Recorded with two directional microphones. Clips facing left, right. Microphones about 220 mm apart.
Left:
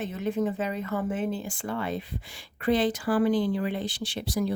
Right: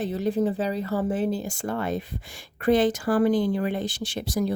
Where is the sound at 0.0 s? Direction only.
35° right (ahead or behind).